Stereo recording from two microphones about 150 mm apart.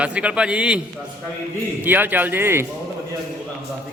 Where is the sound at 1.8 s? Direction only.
10° right (ahead or behind).